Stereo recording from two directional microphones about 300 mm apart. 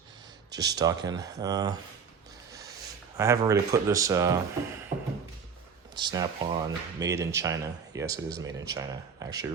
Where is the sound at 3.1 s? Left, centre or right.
Centre.